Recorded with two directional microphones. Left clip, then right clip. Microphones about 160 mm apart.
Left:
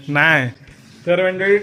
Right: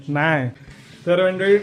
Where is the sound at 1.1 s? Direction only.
20° right (ahead or behind).